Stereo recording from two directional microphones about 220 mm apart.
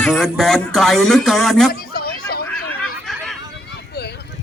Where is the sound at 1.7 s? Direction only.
45° left (ahead or behind).